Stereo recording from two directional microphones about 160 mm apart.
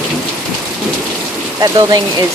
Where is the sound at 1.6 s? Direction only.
25° right (ahead or behind).